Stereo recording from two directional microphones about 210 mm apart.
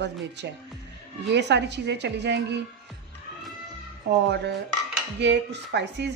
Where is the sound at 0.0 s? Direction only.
55° right (ahead or behind).